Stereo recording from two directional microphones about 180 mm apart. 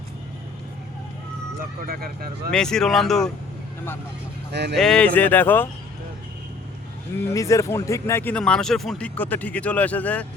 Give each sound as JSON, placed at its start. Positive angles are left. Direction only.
{"t": 1.9, "sound": "speech", "side_deg": -55}
{"t": 2.5, "sound": "speech", "side_deg": 5}
{"t": 4.5, "sound": "speech", "side_deg": -70}
{"t": 4.8, "sound": "speech", "side_deg": 5}
{"t": 7.3, "sound": "speech", "side_deg": 15}